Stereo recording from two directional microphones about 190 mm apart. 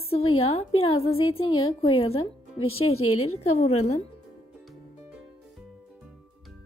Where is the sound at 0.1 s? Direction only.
30° left (ahead or behind).